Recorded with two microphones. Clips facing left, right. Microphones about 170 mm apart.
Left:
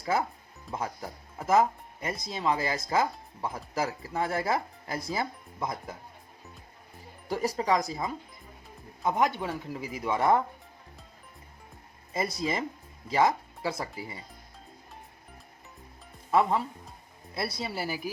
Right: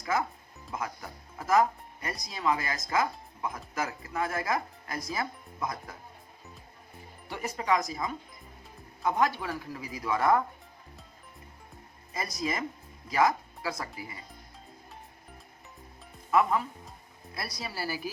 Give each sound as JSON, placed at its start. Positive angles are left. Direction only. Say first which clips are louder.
{"t": 0.0, "sound": "speech", "louder": "left 2 dB", "side_deg": 30}
{"t": 7.3, "sound": "speech", "louder": "left 3 dB", "side_deg": 35}
{"t": 12.1, "sound": "speech", "louder": "left 3 dB", "side_deg": 25}
{"t": 16.3, "sound": "speech", "louder": "left 1 dB", "side_deg": 30}